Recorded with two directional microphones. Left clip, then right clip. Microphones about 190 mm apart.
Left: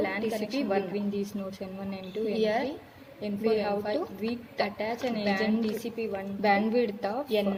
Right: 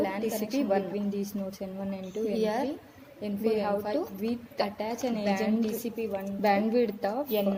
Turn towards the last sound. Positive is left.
turn(degrees=-45)  # may be behind; listen again after turning